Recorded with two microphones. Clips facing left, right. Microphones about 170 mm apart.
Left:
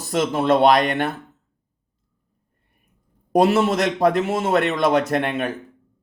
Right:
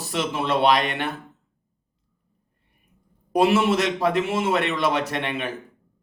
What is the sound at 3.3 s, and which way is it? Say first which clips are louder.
A man's voice: left 2 dB; 40° left (ahead or behind).